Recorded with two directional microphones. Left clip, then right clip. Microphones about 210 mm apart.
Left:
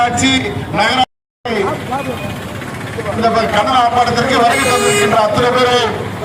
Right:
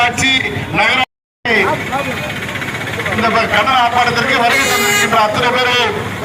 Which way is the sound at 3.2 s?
60° left (ahead or behind).